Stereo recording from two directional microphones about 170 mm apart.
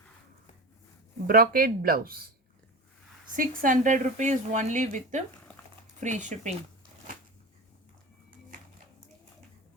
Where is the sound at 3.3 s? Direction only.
55° right (ahead or behind).